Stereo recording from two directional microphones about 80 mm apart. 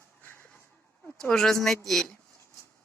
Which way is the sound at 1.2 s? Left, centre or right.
Centre.